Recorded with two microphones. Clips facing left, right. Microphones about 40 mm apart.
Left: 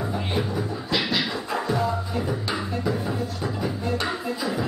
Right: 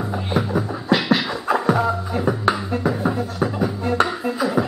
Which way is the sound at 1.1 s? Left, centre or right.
Right.